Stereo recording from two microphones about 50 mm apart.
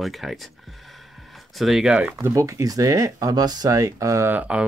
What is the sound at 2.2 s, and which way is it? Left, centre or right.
Speech, right.